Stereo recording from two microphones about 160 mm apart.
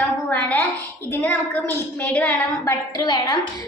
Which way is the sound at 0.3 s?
10° left (ahead or behind).